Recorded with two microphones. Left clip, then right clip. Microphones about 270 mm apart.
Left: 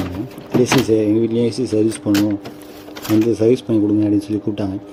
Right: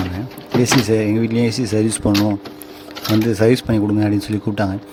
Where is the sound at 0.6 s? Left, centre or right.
Right.